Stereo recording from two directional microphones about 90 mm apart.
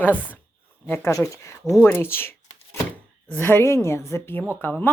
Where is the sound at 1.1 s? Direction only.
35° left (ahead or behind).